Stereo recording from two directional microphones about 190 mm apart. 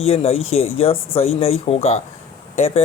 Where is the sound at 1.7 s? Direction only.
35° left (ahead or behind).